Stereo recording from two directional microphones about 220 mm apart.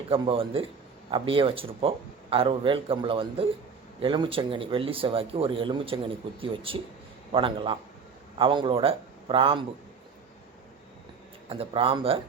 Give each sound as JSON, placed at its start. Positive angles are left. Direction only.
{"t": 0.1, "sound": "speech", "side_deg": -25}
{"t": 11.4, "sound": "speech", "side_deg": -25}